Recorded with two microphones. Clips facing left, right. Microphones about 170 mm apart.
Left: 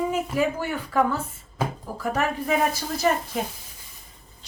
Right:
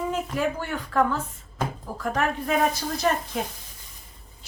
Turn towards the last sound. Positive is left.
turn(degrees=5)  # may be behind; listen again after turning